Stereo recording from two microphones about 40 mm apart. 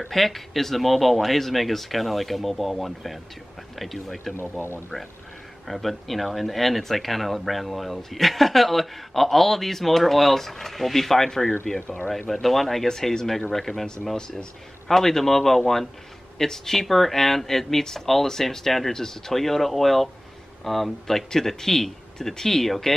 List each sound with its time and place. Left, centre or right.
0.1 s speech: centre
4.4 s speech: left
5.7 s speech: centre
12.8 s speech: centre
14.9 s speech: centre